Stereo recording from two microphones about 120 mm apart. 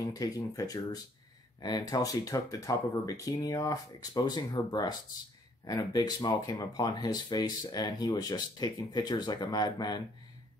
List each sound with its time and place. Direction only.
0.1 s speech: 30° left (ahead or behind)